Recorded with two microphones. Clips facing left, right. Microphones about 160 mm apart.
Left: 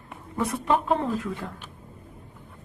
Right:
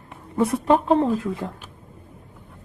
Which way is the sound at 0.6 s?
35° right (ahead or behind).